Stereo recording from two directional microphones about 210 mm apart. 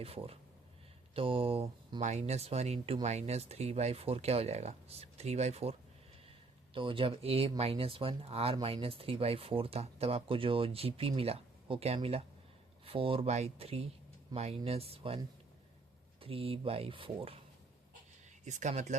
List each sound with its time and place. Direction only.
0.0 s speech: 30° right (ahead or behind)
6.7 s speech: 25° right (ahead or behind)
16.2 s speech: 25° right (ahead or behind)
18.4 s speech: 35° right (ahead or behind)